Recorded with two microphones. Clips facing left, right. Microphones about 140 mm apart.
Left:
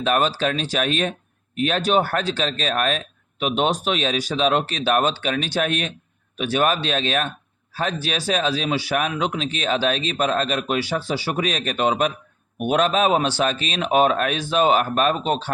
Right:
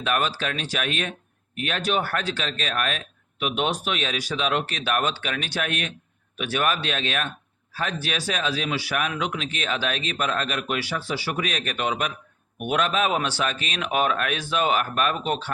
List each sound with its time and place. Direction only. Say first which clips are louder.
0.0 s speech: left 5 dB; 30° left (ahead or behind)